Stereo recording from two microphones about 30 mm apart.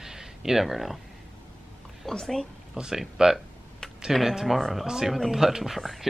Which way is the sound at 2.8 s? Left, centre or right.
Right.